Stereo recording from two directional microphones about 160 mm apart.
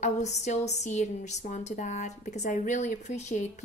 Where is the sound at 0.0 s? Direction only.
45° left (ahead or behind).